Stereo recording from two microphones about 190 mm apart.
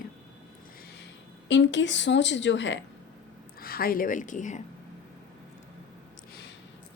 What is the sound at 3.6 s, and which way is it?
A woman's voice, 50° left (ahead or behind).